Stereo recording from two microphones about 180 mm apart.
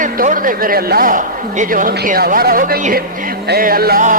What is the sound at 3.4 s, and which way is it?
Music, 55° right (ahead or behind).